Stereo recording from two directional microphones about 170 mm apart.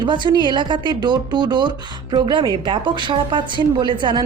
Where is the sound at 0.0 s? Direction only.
25° right (ahead or behind).